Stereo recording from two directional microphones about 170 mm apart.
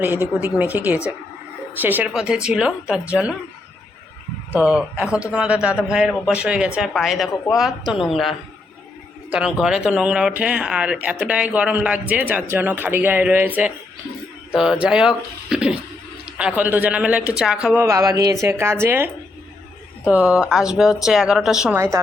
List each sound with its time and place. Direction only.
0.3 s speech: 10° right (ahead or behind)
4.5 s a man's voice: 5° right (ahead or behind)
14.5 s a man's voice: 5° right (ahead or behind)
17.8 s a man's voice: 15° right (ahead or behind)